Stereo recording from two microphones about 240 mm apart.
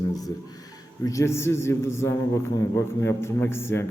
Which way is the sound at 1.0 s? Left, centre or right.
Centre.